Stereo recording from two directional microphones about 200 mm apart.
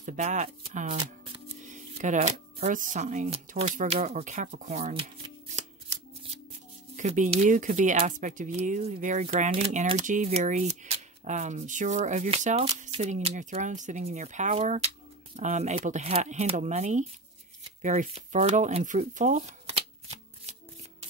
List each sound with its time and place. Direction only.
0.0 s speech: 35° right (ahead or behind)
7.0 s speech: 35° right (ahead or behind)